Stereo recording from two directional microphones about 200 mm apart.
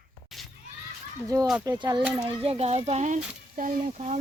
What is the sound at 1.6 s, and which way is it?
Speech, 20° right (ahead or behind).